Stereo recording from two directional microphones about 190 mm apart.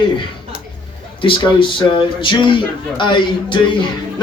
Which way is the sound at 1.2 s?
25° left (ahead or behind).